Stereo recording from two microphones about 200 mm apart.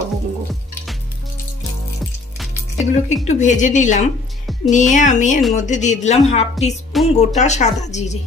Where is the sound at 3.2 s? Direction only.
40° left (ahead or behind).